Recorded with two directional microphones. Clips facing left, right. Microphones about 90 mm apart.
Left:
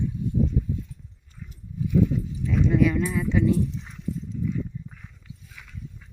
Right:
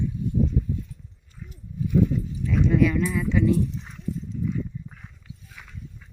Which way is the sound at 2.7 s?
20° left (ahead or behind).